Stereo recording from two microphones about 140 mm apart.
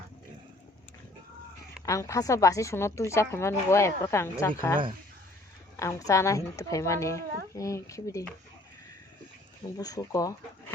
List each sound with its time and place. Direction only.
1.8 s a woman's voice: 25° left (ahead or behind)
9.7 s a woman's voice: 25° left (ahead or behind)